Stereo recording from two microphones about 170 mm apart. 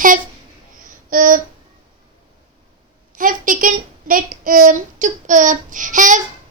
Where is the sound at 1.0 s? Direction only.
55° right (ahead or behind).